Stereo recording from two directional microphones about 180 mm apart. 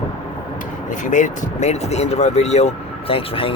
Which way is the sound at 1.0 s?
45° left (ahead or behind).